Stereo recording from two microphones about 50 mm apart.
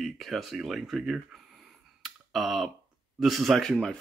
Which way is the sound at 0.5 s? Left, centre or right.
Centre.